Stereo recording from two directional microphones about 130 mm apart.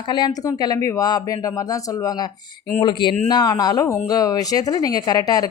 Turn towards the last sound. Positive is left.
turn(degrees=30)  # may be behind; listen again after turning